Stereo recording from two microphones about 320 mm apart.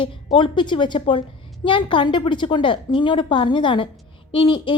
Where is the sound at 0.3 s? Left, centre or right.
Centre.